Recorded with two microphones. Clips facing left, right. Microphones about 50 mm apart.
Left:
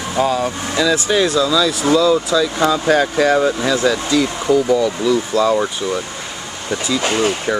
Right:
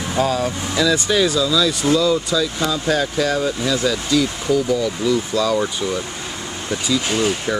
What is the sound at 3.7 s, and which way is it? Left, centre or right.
Speech, centre.